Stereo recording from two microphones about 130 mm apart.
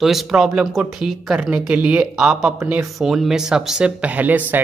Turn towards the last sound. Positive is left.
turn(degrees=-10)  # may be behind; listen again after turning